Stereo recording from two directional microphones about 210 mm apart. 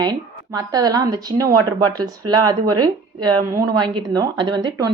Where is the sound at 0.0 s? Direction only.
20° right (ahead or behind).